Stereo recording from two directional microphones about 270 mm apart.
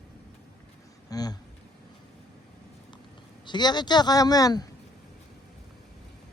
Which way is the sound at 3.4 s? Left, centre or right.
Centre.